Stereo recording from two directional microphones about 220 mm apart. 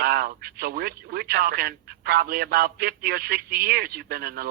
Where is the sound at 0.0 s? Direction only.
45° right (ahead or behind).